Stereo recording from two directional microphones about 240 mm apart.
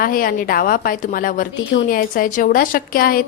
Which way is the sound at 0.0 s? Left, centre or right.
Left.